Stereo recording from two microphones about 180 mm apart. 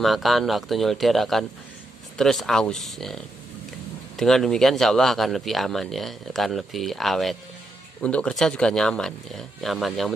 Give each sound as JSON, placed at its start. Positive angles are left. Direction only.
{"t": 0.0, "sound": "speech", "side_deg": 0}
{"t": 4.2, "sound": "speech", "side_deg": 0}